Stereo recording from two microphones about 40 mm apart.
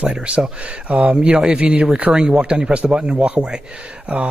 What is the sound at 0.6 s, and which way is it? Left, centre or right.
A man's voice, right.